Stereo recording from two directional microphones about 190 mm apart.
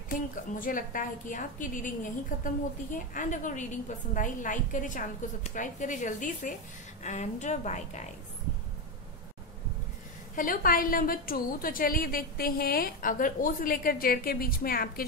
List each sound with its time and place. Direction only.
0.1 s a woman's voice: 45° left (ahead or behind)
10.3 s a woman's voice: 45° left (ahead or behind)